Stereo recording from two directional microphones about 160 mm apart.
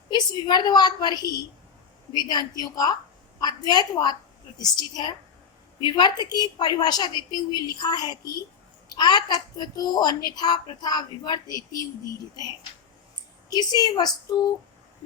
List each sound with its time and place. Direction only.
0.1 s a child's voice: 25° left (ahead or behind)
13.5 s a child's voice: 25° left (ahead or behind)